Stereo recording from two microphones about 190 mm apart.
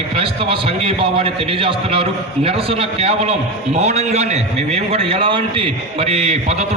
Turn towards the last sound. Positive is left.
turn(degrees=-35)  # may be behind; listen again after turning